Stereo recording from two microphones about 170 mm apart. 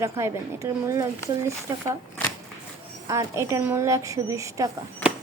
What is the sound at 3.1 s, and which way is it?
A woman's voice, 15° right (ahead or behind).